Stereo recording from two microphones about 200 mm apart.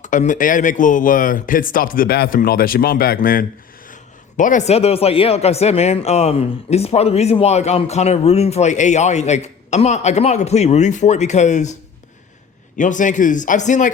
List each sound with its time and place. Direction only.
0.0 s speech: 40° left (ahead or behind)